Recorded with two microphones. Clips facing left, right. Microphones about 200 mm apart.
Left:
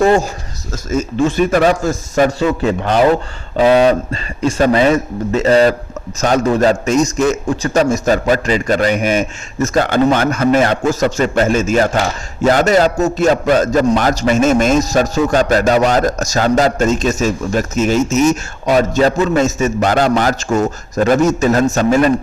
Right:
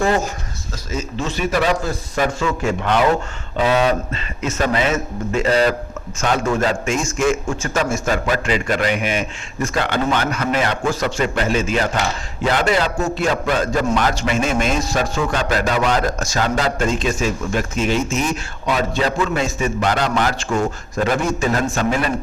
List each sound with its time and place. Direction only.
0.9 s a man's voice: 50° left (ahead or behind)
2.5 s a man's voice: 30° left (ahead or behind)